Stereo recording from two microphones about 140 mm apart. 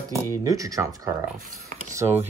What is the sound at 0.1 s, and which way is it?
Speech, 25° right (ahead or behind).